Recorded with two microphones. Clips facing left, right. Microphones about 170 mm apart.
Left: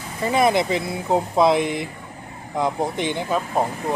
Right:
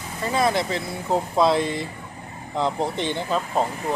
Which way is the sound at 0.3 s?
20° left (ahead or behind).